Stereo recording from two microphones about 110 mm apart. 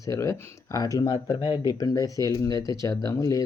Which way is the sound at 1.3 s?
50° left (ahead or behind).